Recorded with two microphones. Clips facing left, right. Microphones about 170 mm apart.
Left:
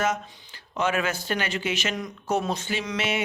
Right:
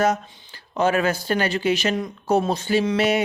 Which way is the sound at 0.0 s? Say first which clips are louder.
Right 5 dB; 40° right (ahead or behind).